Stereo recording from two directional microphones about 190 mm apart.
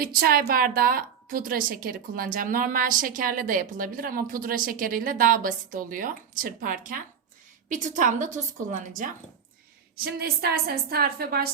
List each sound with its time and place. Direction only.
0.0 s a woman's voice: 50° right (ahead or behind)
10.0 s a woman's voice: 55° right (ahead or behind)